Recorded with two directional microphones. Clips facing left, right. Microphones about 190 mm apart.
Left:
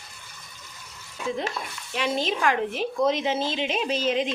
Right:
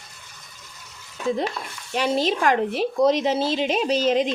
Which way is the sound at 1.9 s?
40° right (ahead or behind).